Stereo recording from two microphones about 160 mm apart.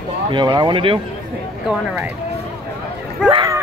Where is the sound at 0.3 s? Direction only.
25° right (ahead or behind).